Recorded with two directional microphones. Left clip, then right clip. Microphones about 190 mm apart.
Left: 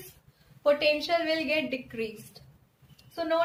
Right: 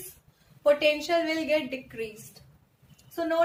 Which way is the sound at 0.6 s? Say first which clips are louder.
Right 2 dB; 20° left (ahead or behind).